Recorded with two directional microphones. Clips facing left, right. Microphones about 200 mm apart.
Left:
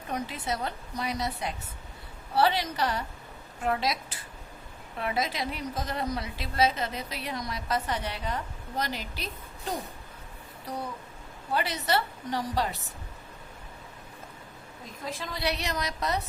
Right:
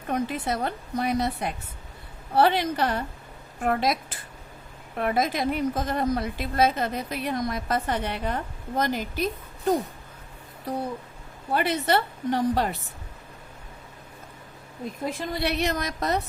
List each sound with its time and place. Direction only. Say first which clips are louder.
0.1 s a woman's voice: right 6 dB; 55° right (ahead or behind)
11.5 s a woman's voice: right 5 dB; 55° right (ahead or behind)
15.3 s a woman's voice: right 5 dB; 55° right (ahead or behind)